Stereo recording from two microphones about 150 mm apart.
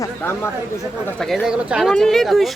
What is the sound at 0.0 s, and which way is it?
Speech, 15° left (ahead or behind).